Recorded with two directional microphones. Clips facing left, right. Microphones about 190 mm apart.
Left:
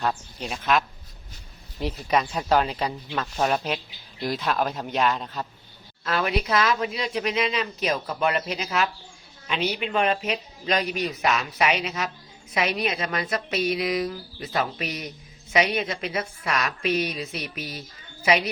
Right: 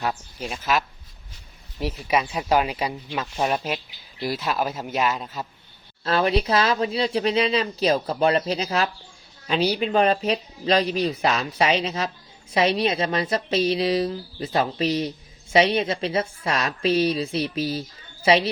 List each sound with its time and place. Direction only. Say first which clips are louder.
0.0 s speech: even; 5° right (ahead or behind)
6.1 s speech: right 4 dB; 30° right (ahead or behind)